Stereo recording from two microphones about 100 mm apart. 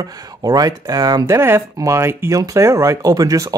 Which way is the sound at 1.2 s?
25° right (ahead or behind).